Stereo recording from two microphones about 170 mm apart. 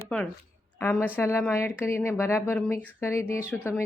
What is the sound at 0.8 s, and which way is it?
Speech, 10° left (ahead or behind).